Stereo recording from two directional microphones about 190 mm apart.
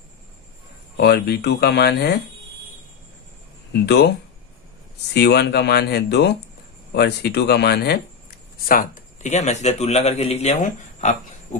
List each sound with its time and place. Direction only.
0.9 s speech: 60° left (ahead or behind)
3.7 s speech: 60° left (ahead or behind)
5.1 s speech: 60° left (ahead or behind)
8.6 s speech: 45° left (ahead or behind)